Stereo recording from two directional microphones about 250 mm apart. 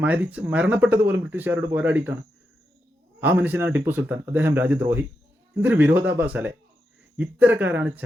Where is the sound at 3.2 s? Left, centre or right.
Centre.